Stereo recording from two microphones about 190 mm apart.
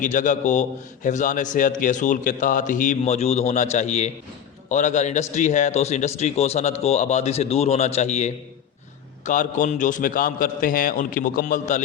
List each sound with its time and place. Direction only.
0.0 s a man's voice: 45° left (ahead or behind)